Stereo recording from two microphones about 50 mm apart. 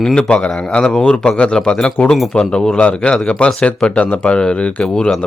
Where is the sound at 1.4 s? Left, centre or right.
Centre.